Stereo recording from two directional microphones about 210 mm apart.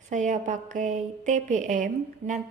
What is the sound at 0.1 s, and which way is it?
A woman's voice, 35° right (ahead or behind).